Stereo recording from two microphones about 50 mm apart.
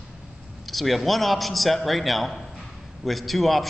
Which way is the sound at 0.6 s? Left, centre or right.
Centre.